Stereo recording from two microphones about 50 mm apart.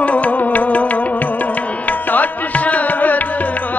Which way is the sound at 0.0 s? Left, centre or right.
Left.